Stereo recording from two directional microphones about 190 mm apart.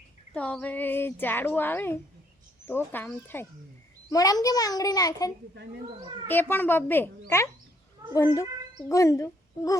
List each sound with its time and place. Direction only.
0.3 s a child's voice: 5° left (ahead or behind)